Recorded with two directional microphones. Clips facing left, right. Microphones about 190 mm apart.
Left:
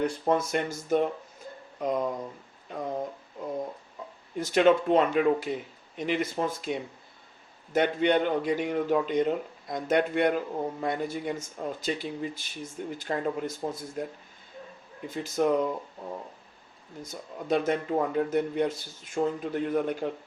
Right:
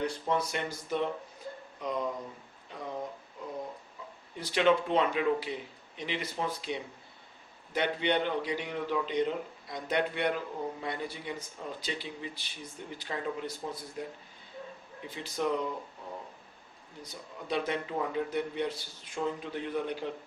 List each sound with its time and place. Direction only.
0.0 s a man's voice: 50° left (ahead or behind)
4.4 s a man's voice: 45° left (ahead or behind)
17.0 s a man's voice: 45° left (ahead or behind)